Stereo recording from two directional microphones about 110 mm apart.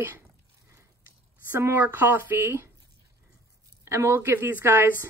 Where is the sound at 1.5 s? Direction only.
20° right (ahead or behind).